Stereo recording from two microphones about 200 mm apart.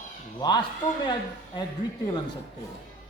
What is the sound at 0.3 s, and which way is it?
Speech, 20° left (ahead or behind).